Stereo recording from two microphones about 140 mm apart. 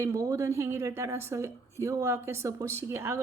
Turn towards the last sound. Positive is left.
turn(degrees=-20)  # may be behind; listen again after turning